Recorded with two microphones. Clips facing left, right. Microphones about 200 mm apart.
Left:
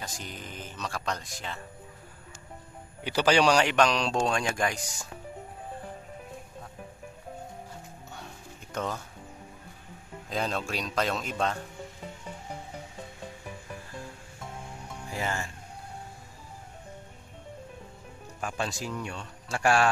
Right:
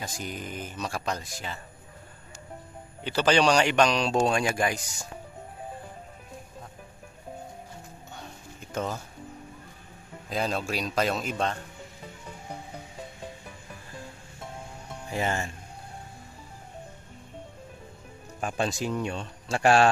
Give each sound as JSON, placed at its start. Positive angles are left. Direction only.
{"t": 0.0, "sound": "speech", "side_deg": -10}
{"t": 3.0, "sound": "speech", "side_deg": 10}
{"t": 8.7, "sound": "speech", "side_deg": -5}
{"t": 10.3, "sound": "speech", "side_deg": -5}
{"t": 15.1, "sound": "speech", "side_deg": -20}
{"t": 18.5, "sound": "speech", "side_deg": -20}